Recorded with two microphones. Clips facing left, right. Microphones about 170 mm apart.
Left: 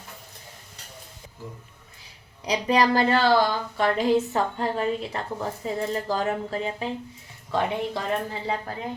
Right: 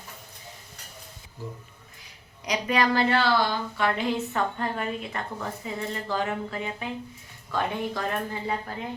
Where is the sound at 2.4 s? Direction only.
35° left (ahead or behind).